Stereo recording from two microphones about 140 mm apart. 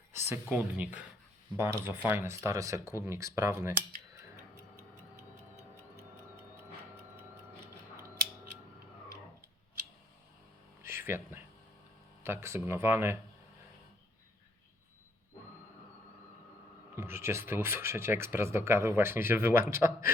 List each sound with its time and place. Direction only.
0.1 s speech: 15° right (ahead or behind)
10.8 s a sound: 20° right (ahead or behind)
12.2 s speech: 20° right (ahead or behind)
16.9 s speech: 20° right (ahead or behind)